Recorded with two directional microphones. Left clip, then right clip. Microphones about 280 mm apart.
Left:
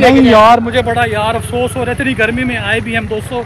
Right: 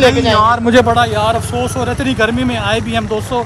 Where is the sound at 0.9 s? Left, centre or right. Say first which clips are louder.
Right 1 dB; centre.